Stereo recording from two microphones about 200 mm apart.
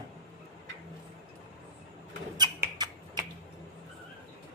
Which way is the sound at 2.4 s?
20° right (ahead or behind).